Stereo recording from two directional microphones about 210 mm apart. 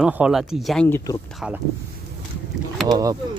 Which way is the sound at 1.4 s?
5° right (ahead or behind).